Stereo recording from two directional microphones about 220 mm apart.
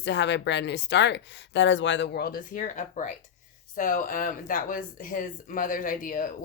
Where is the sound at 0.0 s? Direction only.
55° left (ahead or behind).